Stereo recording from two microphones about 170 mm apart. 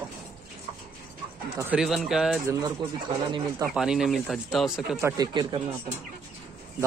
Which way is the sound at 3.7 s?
5° right (ahead or behind).